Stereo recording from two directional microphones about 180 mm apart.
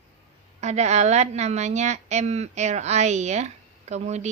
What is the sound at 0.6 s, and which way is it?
A woman's voice, 40° right (ahead or behind).